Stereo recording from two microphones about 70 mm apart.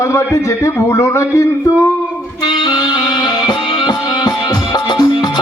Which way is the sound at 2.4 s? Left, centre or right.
Left.